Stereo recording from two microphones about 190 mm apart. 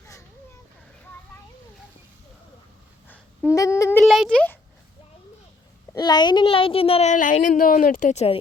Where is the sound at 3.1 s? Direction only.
15° left (ahead or behind).